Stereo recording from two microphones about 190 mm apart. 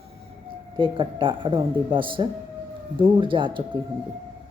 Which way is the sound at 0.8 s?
25° right (ahead or behind).